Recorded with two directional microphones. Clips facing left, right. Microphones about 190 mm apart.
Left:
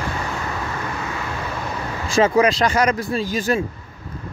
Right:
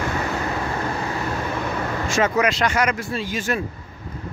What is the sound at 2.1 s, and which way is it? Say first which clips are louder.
Speech: left 5 dB; 30° left (ahead or behind).